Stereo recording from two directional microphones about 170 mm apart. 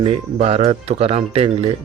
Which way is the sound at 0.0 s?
35° right (ahead or behind).